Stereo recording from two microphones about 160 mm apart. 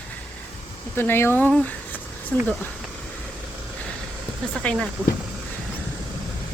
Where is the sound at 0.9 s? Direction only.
15° left (ahead or behind).